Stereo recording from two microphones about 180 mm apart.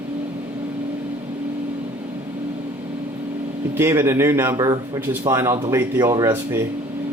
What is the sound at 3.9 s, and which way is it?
Speech, 15° right (ahead or behind).